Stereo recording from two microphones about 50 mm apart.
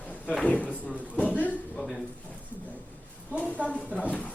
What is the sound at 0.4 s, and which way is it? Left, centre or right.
Speech, left.